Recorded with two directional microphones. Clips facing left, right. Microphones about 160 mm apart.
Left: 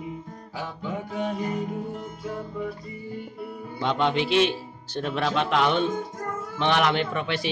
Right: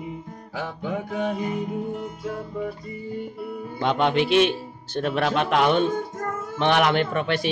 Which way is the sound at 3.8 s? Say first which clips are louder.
Right 3 dB; 55° right (ahead or behind).